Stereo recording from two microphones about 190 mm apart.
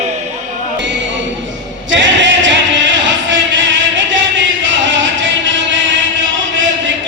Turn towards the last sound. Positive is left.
turn(degrees=-75)  # may be behind; listen again after turning